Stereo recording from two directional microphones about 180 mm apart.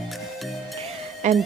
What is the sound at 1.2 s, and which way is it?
Speech, 40° right (ahead or behind).